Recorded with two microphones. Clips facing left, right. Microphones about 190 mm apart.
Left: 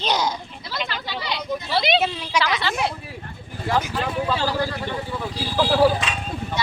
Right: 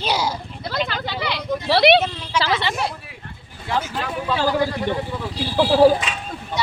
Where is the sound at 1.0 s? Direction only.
65° right (ahead or behind).